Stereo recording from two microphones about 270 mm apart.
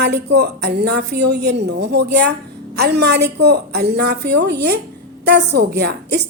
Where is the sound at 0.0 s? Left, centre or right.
Right.